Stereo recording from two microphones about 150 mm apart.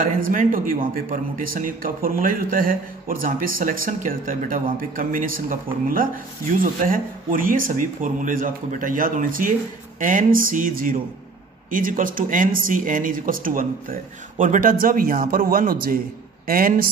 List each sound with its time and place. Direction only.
0.0 s a man's voice: 60° right (ahead or behind)